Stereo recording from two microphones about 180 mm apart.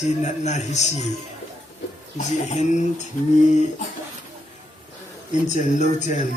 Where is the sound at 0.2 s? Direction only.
40° left (ahead or behind).